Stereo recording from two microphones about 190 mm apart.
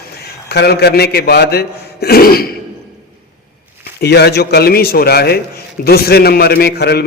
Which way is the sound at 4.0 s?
60° left (ahead or behind).